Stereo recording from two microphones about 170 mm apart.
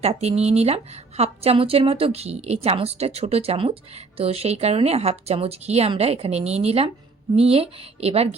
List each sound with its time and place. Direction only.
0.0 s a woman's voice: 40° right (ahead or behind)